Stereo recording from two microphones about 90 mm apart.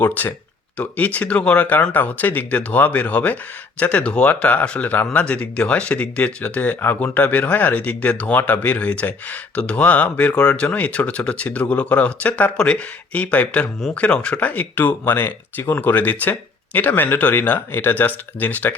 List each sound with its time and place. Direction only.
0.0 s speech: 20° left (ahead or behind)